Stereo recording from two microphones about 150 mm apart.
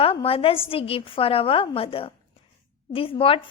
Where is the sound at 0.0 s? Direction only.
40° left (ahead or behind).